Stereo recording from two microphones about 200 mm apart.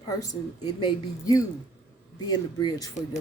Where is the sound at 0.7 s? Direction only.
20° left (ahead or behind).